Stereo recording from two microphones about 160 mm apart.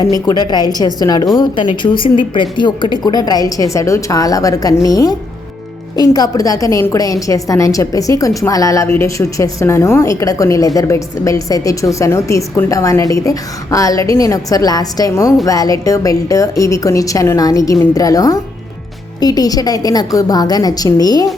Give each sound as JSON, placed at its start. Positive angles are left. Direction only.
{"t": 0.3, "sound": "a woman's voice", "side_deg": 25}